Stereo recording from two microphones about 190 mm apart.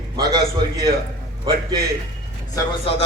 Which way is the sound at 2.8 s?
30° left (ahead or behind).